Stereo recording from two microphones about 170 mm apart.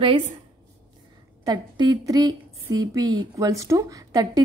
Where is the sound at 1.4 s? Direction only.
25° right (ahead or behind).